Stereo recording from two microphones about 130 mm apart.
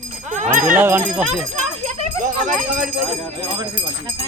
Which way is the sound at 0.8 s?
15° right (ahead or behind).